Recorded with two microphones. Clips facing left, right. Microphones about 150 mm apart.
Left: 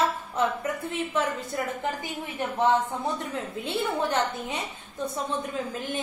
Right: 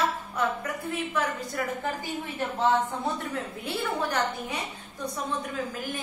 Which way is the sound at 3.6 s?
25° left (ahead or behind).